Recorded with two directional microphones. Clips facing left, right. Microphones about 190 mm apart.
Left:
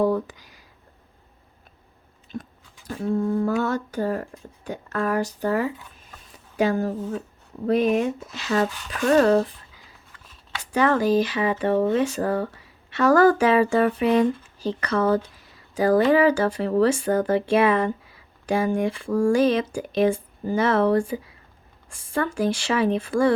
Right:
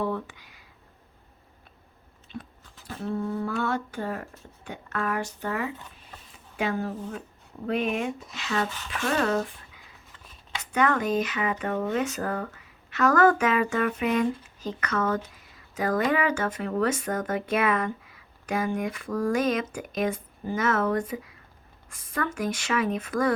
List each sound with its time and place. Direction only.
0.0 s a sound: 35° left (ahead or behind)
2.3 s biting: 40° left (ahead or behind)
3.4 s speech: 40° left (ahead or behind)
10.6 s speech: 30° left (ahead or behind)